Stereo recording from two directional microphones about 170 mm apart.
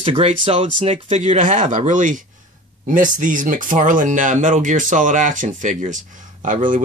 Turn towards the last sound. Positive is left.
turn(degrees=-50)  # may be behind; listen again after turning